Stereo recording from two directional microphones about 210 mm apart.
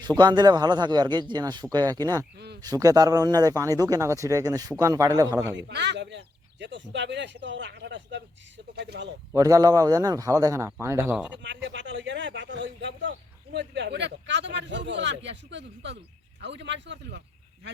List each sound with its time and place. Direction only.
0.0 s a man's voice: 20° right (ahead or behind)
5.5 s speech: 55° right (ahead or behind)
9.3 s a man's voice: 15° right (ahead or behind)
11.4 s speech: 60° right (ahead or behind)